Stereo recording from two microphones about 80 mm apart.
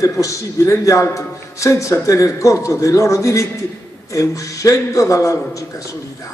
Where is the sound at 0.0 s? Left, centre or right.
Left.